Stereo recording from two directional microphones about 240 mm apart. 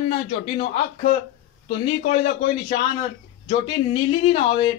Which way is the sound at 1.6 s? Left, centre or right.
Left.